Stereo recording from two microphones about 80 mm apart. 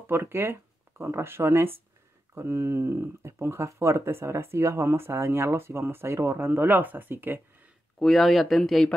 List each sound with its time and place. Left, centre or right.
0.0 s speech: right
8.0 s speech: centre